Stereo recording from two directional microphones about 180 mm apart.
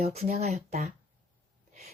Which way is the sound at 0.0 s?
35° right (ahead or behind).